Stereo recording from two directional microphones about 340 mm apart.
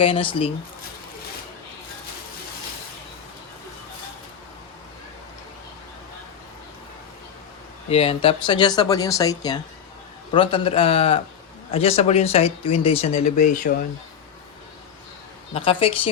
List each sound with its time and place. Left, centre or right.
0.0 s speech: centre
7.9 s speech: centre
15.5 s speech: centre